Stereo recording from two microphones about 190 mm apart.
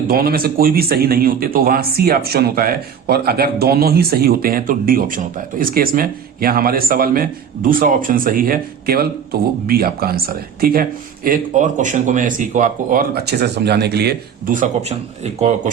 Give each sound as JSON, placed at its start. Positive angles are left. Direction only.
{"t": 0.1, "sound": "speech", "side_deg": -50}